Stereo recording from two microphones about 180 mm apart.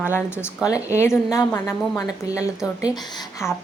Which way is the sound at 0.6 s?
15° left (ahead or behind).